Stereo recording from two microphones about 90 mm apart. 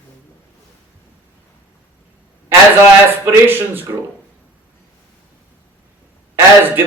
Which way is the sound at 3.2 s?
25° right (ahead or behind).